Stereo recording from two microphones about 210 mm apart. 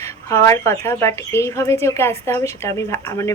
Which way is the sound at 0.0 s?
15° left (ahead or behind).